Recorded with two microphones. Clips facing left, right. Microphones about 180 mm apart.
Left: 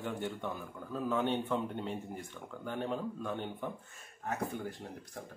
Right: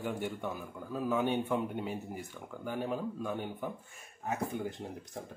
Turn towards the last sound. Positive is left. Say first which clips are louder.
# right 3 dB
turn(degrees=-20)  # may be behind; listen again after turning